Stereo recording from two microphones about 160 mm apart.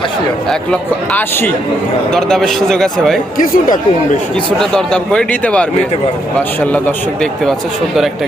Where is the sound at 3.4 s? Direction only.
55° left (ahead or behind).